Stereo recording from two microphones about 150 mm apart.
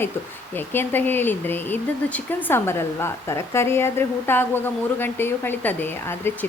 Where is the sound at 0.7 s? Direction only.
15° left (ahead or behind).